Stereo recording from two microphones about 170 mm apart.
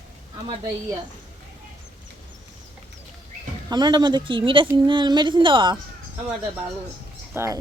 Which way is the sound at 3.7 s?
25° right (ahead or behind).